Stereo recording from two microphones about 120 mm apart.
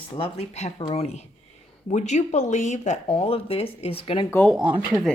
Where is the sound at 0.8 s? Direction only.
50° left (ahead or behind).